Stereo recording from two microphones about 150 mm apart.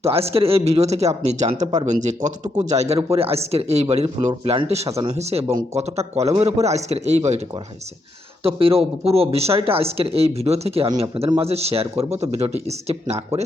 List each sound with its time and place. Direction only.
0.3 s speech: 40° right (ahead or behind)
8.4 s speech: 40° right (ahead or behind)